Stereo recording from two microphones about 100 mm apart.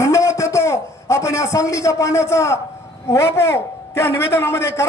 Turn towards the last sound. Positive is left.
turn(degrees=30)  # may be behind; listen again after turning